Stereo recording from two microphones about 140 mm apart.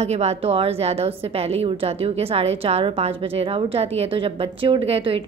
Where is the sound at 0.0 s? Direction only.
50° right (ahead or behind).